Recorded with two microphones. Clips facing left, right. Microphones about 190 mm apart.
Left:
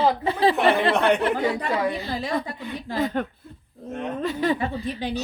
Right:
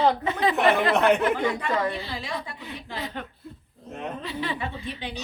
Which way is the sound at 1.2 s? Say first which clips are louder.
Left 1 dB; 35° left (ahead or behind).